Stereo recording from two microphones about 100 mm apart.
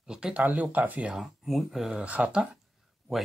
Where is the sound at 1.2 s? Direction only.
Centre (ahead or behind).